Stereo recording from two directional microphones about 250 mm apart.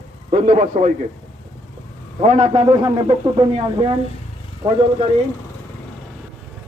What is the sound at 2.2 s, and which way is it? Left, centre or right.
A man's voice, right.